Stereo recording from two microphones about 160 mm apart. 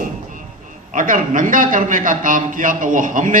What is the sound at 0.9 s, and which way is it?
A man's voice, 55° right (ahead or behind).